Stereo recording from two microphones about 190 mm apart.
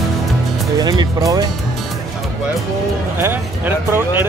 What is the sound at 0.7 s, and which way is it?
Speech, 20° right (ahead or behind).